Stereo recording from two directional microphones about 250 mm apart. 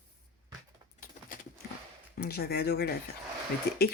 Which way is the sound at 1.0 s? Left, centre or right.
Left.